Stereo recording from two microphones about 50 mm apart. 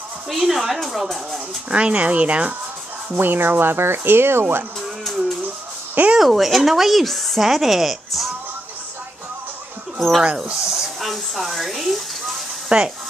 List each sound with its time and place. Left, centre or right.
0.3 s speech: centre
1.7 s speech: right
3.2 s speech: right
6.1 s speech: centre
9.9 s speech: centre
12.6 s speech: centre